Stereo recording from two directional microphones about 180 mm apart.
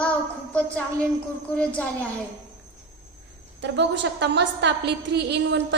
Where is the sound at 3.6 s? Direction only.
75° right (ahead or behind).